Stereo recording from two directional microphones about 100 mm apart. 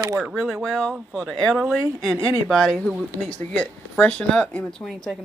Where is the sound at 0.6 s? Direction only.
10° left (ahead or behind).